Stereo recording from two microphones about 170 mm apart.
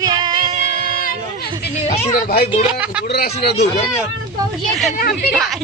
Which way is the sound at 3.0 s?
65° left (ahead or behind).